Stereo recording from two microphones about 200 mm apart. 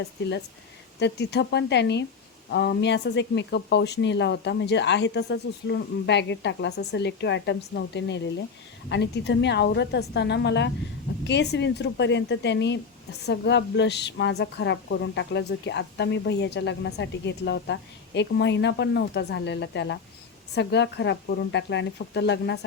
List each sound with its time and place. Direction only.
0.9 s a woman's voice: 60° left (ahead or behind)